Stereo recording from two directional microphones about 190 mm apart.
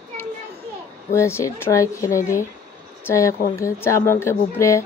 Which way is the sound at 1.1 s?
15° left (ahead or behind).